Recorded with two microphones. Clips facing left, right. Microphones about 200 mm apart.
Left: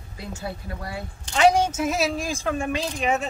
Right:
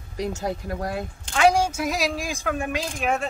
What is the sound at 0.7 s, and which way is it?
Speech, 45° right (ahead or behind).